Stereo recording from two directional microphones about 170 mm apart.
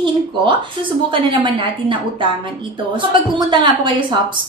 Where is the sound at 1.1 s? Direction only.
30° right (ahead or behind).